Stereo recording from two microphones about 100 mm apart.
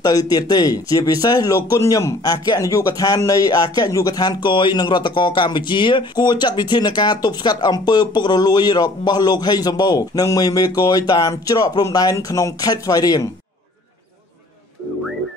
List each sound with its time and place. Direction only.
0.0 s speech: 40° left (ahead or behind)